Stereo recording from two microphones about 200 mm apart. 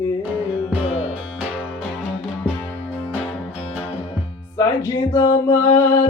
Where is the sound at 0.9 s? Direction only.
85° left.